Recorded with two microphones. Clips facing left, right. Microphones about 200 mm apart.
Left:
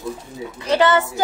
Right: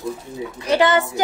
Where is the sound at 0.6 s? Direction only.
15° right (ahead or behind).